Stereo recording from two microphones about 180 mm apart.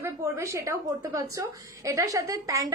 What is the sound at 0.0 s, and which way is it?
A woman's voice, 15° right (ahead or behind).